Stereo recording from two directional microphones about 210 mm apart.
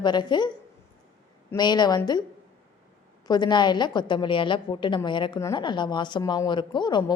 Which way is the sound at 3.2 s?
20° left (ahead or behind).